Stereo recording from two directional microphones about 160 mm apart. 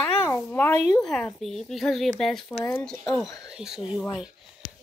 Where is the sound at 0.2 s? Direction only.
15° left (ahead or behind).